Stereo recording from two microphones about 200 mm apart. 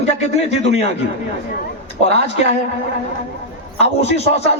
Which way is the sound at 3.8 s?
30° left (ahead or behind).